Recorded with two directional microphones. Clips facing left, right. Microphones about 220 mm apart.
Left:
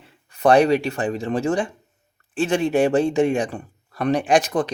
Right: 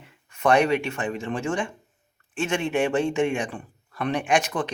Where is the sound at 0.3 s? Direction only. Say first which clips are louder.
Left 5 dB; 35° left (ahead or behind).